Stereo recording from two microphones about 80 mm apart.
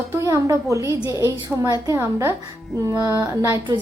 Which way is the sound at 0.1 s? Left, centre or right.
Right.